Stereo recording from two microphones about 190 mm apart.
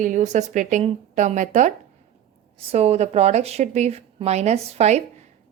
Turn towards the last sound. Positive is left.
turn(degrees=-35)  # may be behind; listen again after turning